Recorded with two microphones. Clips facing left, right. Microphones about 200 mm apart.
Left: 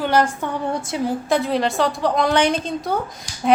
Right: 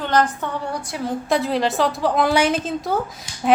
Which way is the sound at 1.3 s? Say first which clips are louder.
Right 1 dB; centre (ahead or behind).